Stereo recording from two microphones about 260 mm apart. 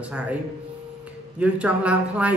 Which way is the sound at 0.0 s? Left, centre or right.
Centre.